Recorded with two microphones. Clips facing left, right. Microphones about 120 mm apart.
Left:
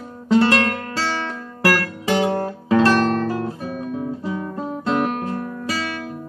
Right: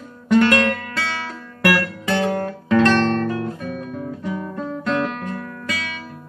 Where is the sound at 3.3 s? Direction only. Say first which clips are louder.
Even; 35° left (ahead or behind).